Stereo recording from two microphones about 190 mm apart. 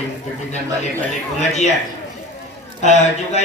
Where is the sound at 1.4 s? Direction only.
35° left (ahead or behind).